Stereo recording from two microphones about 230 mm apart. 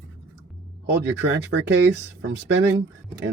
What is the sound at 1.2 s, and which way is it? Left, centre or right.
Speech, right.